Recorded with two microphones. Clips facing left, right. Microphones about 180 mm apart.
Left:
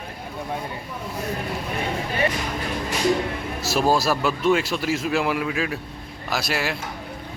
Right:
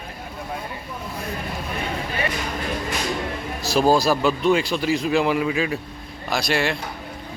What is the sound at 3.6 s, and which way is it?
Speech, centre (ahead or behind).